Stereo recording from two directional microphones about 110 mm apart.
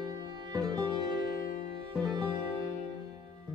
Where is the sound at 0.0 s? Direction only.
40° right (ahead or behind).